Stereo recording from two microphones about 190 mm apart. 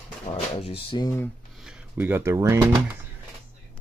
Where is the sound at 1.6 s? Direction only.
5° right (ahead or behind).